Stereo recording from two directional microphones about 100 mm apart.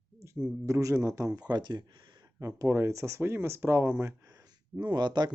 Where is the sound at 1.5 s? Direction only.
45° right (ahead or behind).